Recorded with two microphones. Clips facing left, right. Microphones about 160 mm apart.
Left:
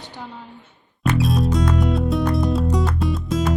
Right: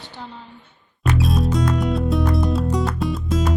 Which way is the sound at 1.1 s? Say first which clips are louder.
Even; centre (ahead or behind).